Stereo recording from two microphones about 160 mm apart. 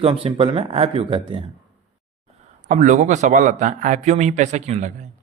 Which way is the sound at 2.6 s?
50° right (ahead or behind).